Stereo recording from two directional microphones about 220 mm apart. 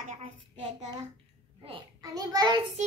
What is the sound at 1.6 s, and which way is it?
A child's voice, 20° right (ahead or behind).